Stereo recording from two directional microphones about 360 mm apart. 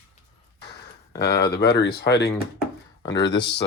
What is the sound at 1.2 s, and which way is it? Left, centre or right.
Speech, left.